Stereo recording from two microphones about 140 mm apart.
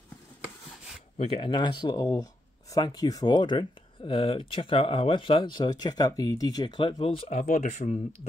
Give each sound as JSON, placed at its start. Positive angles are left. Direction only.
{"t": 1.1, "sound": "speech", "side_deg": 45}